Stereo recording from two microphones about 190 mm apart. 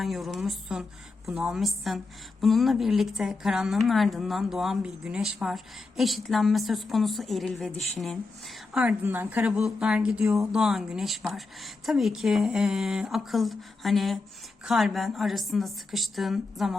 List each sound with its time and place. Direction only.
0.0 s a woman's voice: centre (ahead or behind)